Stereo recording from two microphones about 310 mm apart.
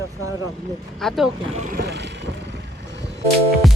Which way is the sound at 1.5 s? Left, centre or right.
Right.